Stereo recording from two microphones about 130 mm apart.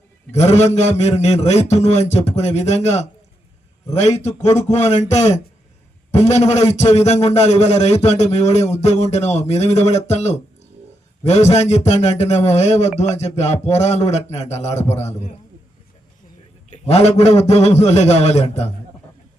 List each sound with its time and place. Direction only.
0.3 s a man's voice: 55° left (ahead or behind)
16.6 s a man's voice: 55° left (ahead or behind)